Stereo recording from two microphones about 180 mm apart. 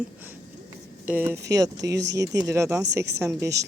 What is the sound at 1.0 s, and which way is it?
Speech, 10° right (ahead or behind).